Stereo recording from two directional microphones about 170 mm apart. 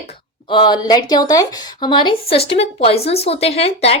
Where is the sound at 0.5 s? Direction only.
25° left (ahead or behind).